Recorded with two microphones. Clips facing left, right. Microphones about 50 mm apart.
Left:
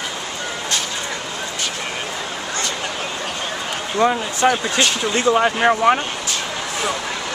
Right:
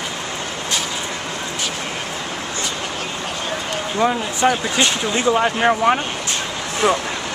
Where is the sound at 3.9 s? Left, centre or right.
Centre.